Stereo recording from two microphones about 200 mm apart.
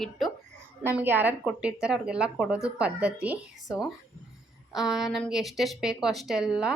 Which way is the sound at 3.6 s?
20° left (ahead or behind).